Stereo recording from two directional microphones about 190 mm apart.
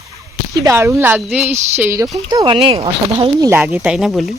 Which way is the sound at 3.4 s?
10° right (ahead or behind).